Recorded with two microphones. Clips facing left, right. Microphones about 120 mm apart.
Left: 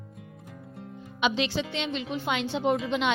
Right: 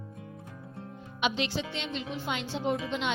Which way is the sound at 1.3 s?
90° left.